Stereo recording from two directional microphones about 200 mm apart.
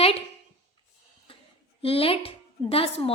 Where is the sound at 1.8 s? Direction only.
30° left (ahead or behind).